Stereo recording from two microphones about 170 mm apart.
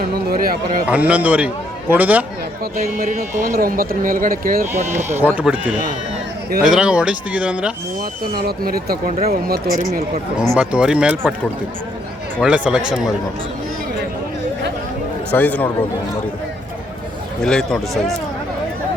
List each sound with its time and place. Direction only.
0.3 s speech: 60° right (ahead or behind)
0.9 s a man's voice: 10° right (ahead or behind)
2.7 s speech: 55° right (ahead or behind)
5.0 s a man's voice: 10° right (ahead or behind)
8.2 s speech: 65° right (ahead or behind)
10.3 s a man's voice: centre (ahead or behind)
12.4 s a man's voice: 5° right (ahead or behind)
15.3 s a man's voice: 10° left (ahead or behind)
17.4 s speech: 5° left (ahead or behind)